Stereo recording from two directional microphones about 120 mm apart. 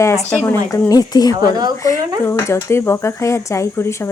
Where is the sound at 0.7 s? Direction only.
30° left (ahead or behind).